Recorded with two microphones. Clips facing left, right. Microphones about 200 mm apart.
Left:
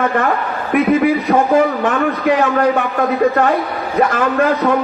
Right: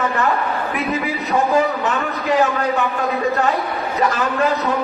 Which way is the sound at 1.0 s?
55° left (ahead or behind).